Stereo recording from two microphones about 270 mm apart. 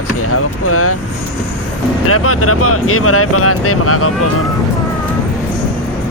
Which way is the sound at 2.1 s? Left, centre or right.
Left.